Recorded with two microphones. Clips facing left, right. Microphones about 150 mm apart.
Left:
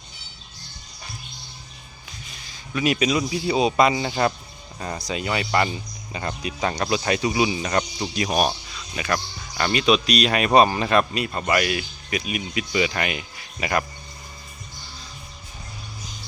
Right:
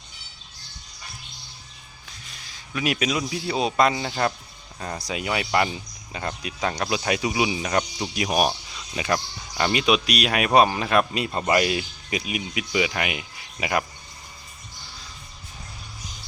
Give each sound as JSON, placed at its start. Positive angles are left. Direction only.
{"t": 2.2, "sound": "speech", "side_deg": 0}
{"t": 4.9, "sound": "speech", "side_deg": -10}
{"t": 11.1, "sound": "speech", "side_deg": -20}